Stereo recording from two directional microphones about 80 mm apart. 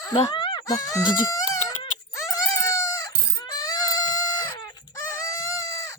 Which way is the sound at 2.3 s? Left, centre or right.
Left.